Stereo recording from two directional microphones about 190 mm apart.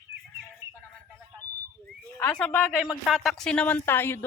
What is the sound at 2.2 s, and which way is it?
Speech, 10° left (ahead or behind).